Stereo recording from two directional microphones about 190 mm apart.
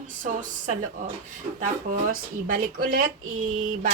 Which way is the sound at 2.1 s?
50° right (ahead or behind).